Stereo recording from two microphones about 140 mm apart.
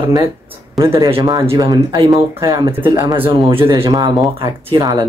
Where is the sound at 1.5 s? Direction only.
25° right (ahead or behind).